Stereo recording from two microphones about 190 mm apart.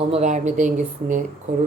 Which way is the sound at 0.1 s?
40° right (ahead or behind).